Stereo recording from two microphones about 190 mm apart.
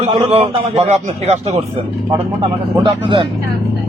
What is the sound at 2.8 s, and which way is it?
Speech, 25° right (ahead or behind).